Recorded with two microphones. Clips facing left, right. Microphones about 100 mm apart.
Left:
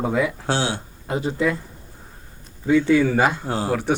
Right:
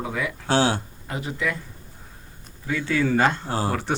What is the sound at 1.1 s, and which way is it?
Speech, 30° left (ahead or behind).